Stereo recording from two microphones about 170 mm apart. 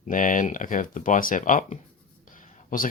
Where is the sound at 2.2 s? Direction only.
50° left (ahead or behind).